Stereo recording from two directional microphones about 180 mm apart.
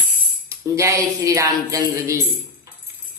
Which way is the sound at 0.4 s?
15° right (ahead or behind).